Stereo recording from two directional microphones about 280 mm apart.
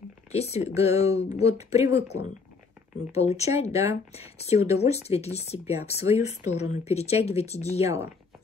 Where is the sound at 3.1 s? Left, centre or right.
Left.